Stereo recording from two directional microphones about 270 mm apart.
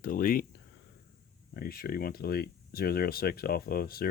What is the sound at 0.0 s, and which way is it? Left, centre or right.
Speech, left.